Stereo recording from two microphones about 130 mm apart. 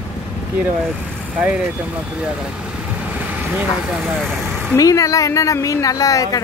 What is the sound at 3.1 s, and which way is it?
Speech, 5° right (ahead or behind).